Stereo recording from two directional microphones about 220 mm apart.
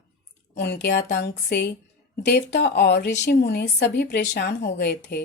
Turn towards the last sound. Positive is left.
turn(degrees=50)  # may be behind; listen again after turning